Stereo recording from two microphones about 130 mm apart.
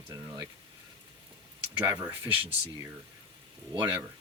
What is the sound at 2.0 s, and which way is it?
Speech, 15° right (ahead or behind).